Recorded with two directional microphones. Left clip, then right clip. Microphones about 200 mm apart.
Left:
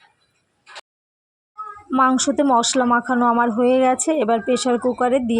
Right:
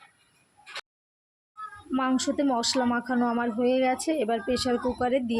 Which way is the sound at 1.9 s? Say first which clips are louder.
Left 10 dB; 20° left (ahead or behind).